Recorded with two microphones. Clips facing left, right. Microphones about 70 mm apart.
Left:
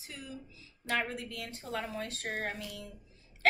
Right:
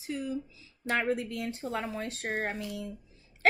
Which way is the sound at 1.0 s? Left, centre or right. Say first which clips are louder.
Right 9 dB; right.